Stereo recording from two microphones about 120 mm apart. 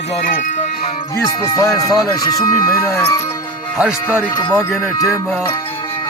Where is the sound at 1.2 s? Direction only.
30° left (ahead or behind).